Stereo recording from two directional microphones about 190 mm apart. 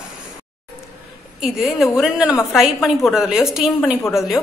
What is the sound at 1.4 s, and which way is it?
A woman's voice, centre (ahead or behind).